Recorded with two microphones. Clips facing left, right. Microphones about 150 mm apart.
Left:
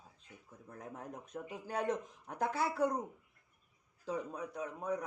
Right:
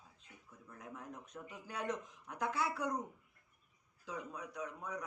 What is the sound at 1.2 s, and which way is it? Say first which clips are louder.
Speech: left 6 dB; 30° left (ahead or behind).